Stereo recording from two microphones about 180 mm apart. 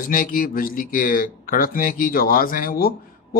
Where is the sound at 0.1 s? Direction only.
50° left (ahead or behind).